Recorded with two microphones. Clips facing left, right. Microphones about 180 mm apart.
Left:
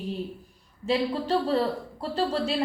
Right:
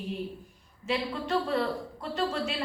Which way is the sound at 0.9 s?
35° left (ahead or behind).